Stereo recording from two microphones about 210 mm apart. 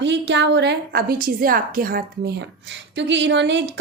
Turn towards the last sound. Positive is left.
turn(degrees=-55)  # may be behind; listen again after turning